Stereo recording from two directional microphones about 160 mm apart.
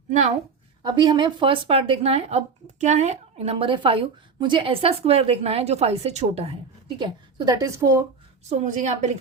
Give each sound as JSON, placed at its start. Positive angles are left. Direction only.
{"t": 0.8, "sound": "a woman's voice", "side_deg": -25}
{"t": 8.4, "sound": "a woman's voice", "side_deg": -50}